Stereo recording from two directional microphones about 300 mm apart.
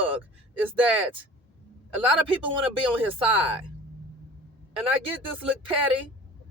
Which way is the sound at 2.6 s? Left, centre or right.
Centre.